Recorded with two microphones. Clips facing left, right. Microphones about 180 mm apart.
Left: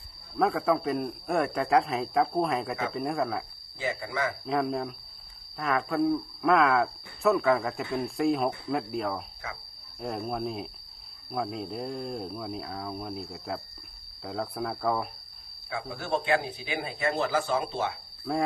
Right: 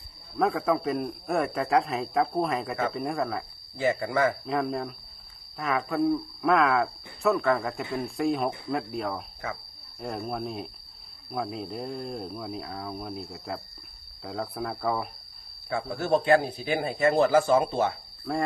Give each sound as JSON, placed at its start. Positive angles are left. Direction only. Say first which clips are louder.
{"t": 0.3, "sound": "speech", "louder": "even", "side_deg": 0}
{"t": 3.8, "sound": "a man's voice", "louder": "right 6 dB", "side_deg": -50}
{"t": 4.4, "sound": "speech", "louder": "even", "side_deg": 0}
{"t": 15.7, "sound": "a man's voice", "louder": "right 5 dB", "side_deg": -45}
{"t": 18.3, "sound": "speech", "louder": "even", "side_deg": 0}